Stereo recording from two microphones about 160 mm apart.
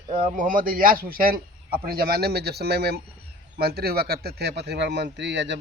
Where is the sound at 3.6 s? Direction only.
80° right.